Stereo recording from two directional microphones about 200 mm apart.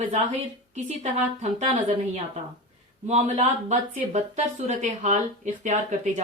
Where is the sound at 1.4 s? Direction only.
35° right (ahead or behind).